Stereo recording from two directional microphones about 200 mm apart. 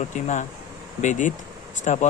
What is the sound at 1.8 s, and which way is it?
Speech, 35° left (ahead or behind).